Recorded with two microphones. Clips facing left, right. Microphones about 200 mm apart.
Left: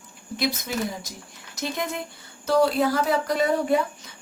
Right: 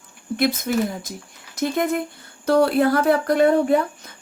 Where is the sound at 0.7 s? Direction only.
55° right (ahead or behind).